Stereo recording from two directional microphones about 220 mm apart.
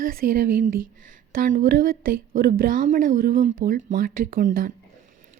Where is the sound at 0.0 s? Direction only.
40° right (ahead or behind).